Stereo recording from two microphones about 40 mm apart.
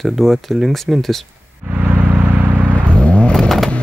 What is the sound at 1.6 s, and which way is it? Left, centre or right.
Vehicle, right.